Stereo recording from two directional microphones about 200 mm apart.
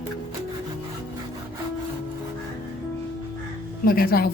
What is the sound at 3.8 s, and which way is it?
Speech, 50° left (ahead or behind).